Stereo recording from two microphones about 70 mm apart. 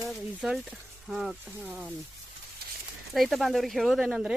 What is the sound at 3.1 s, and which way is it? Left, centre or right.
Speech, centre.